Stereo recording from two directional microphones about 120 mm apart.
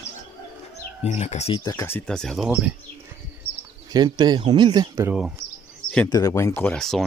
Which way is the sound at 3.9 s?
35° right (ahead or behind).